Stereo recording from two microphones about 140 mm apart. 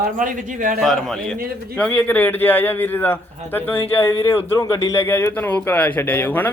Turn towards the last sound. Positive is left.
turn(degrees=15)  # may be behind; listen again after turning